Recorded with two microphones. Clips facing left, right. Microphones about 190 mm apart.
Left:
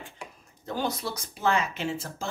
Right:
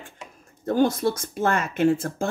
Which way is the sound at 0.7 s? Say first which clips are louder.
Right 10 dB; 50° right (ahead or behind).